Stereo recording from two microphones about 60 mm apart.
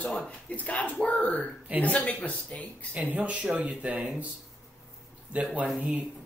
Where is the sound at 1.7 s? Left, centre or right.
Right.